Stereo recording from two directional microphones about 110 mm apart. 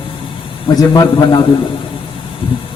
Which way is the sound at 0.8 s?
35° left (ahead or behind).